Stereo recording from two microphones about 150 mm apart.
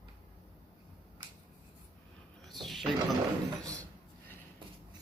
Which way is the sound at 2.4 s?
Centre (ahead or behind).